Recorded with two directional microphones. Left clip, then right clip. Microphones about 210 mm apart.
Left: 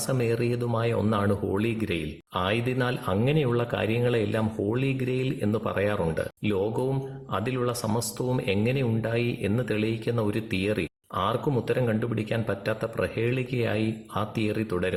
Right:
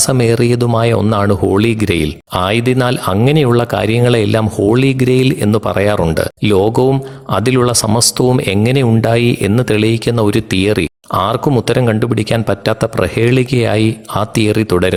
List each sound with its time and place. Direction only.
0.1 s speech: 45° right (ahead or behind)